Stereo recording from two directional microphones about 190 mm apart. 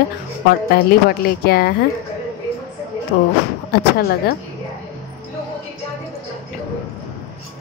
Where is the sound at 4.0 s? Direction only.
55° left (ahead or behind).